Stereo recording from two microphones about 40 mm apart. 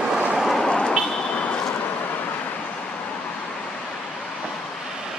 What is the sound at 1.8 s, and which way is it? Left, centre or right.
Vehicle, left.